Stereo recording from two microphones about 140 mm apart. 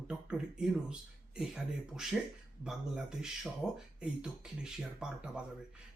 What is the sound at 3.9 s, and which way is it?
Speech, 5° right (ahead or behind).